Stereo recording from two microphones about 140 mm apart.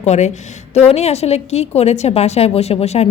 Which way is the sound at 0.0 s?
55° left (ahead or behind).